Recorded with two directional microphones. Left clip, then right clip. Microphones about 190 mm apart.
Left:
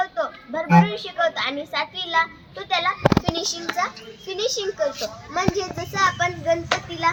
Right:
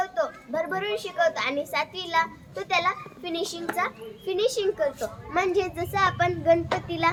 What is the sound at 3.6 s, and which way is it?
A child's voice, 25° right (ahead or behind).